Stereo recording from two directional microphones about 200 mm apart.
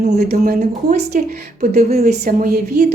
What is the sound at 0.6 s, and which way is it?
A woman's voice, 40° right (ahead or behind).